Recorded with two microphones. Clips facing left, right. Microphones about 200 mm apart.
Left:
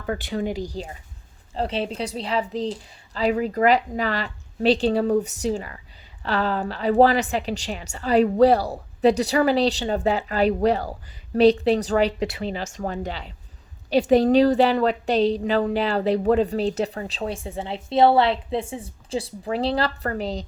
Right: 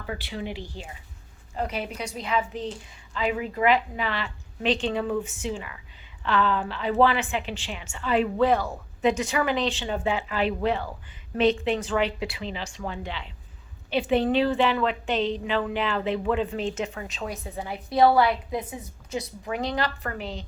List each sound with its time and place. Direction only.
0.0 s a woman's voice: 45° left (ahead or behind)